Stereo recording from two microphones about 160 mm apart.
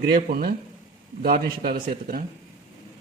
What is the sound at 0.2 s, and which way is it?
A man's voice, 60° right (ahead or behind).